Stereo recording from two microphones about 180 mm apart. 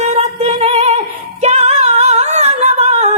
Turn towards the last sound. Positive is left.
turn(degrees=-35)  # may be behind; listen again after turning